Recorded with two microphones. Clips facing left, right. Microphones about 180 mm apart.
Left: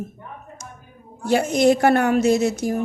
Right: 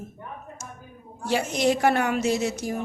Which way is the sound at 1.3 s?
50° left (ahead or behind).